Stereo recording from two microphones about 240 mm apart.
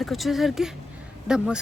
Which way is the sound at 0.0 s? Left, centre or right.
Centre.